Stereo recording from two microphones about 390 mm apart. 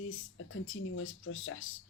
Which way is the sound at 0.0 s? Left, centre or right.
Left.